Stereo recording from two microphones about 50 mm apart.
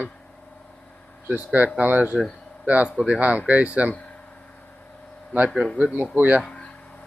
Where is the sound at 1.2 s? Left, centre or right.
Right.